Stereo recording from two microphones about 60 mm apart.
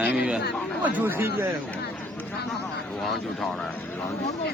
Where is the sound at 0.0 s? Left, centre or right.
Right.